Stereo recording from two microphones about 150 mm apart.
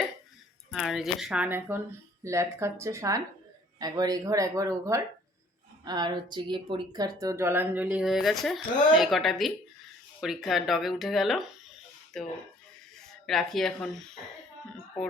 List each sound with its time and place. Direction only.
0.7 s speech: 5° right (ahead or behind)